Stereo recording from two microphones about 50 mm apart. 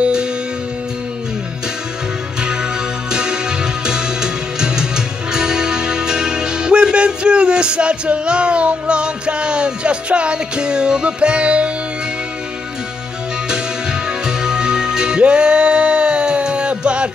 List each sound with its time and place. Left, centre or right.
0.0 s music: centre
3.1 s music: centre
14.2 s music: centre